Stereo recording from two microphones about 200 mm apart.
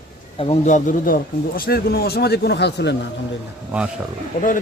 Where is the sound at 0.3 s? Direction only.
30° left (ahead or behind); by 2.9 s 60° left (ahead or behind).